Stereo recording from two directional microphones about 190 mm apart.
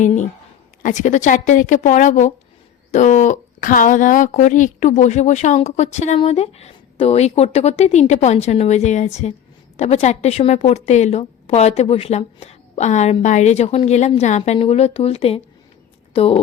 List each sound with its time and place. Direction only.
0.0 s a woman's voice: 40° left (ahead or behind)